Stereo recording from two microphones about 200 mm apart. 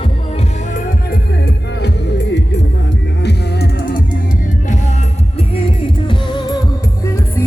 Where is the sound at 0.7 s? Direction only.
45° left (ahead or behind).